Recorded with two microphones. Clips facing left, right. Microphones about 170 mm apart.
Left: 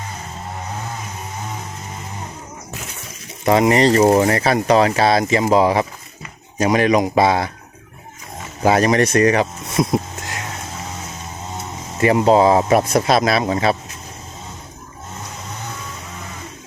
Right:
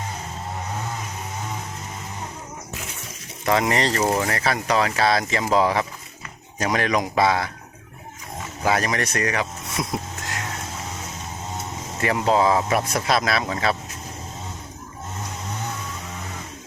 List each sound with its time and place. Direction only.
3.4 s speech: 20° left (ahead or behind)
4.1 s speech: 30° left (ahead or behind)
8.6 s speech: 30° left (ahead or behind)
11.9 s speech: 25° left (ahead or behind)